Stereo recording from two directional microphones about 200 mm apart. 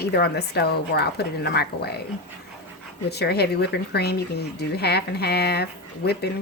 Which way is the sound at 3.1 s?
55° left (ahead or behind).